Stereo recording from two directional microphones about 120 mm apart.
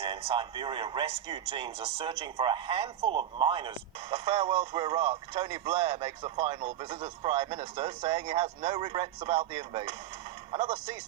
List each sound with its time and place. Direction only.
0.0 s speech: 50° right (ahead or behind)